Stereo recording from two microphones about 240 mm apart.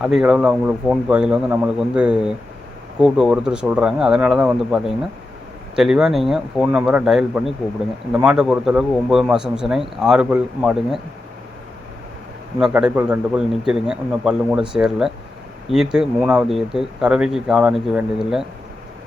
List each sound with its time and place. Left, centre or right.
0.0 s a man's voice: centre
12.5 s a man's voice: centre